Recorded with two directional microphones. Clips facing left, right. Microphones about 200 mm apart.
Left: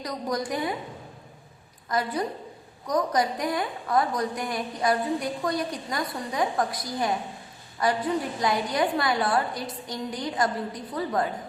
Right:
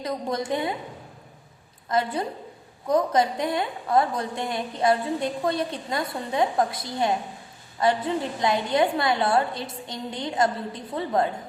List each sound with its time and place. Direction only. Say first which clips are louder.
0.0 s a woman's voice: right 2 dB; 25° right (ahead or behind)
1.9 s a woman's voice: right 2 dB; 25° right (ahead or behind)